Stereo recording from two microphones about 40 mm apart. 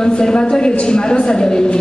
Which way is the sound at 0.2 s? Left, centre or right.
Left.